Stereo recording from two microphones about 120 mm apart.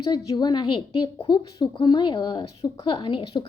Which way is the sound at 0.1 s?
30° left (ahead or behind).